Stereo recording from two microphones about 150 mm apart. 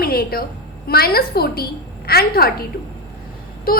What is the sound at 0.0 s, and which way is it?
A woman's voice, 90° left.